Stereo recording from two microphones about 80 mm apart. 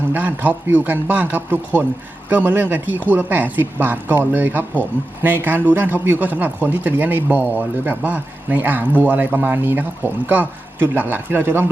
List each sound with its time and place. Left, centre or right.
0.1 s speech: right